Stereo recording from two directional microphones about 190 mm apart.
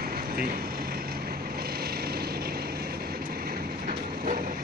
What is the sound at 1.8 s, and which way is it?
Vehicle, 55° right (ahead or behind).